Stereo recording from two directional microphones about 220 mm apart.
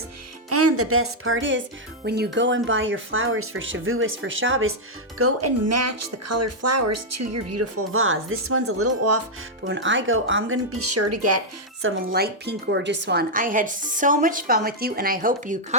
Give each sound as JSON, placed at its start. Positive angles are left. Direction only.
{"t": 0.5, "sound": "speech", "side_deg": -90}
{"t": 2.0, "sound": "speech", "side_deg": -45}
{"t": 5.1, "sound": "speech", "side_deg": -90}
{"t": 9.6, "sound": "speech", "side_deg": -60}
{"t": 12.1, "sound": "a woman's voice", "side_deg": -45}